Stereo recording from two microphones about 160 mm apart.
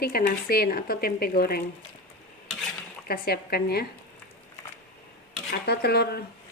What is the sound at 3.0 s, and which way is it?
Speech, 70° left (ahead or behind).